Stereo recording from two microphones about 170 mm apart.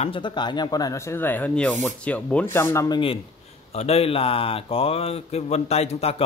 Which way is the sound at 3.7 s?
35° left (ahead or behind).